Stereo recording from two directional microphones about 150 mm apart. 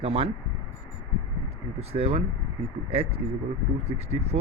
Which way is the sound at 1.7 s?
40° right (ahead or behind).